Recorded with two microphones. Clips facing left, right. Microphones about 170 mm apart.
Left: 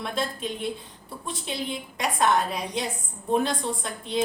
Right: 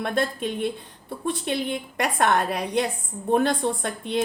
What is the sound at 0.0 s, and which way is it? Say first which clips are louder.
A woman's voice: right 4 dB; 60° right (ahead or behind).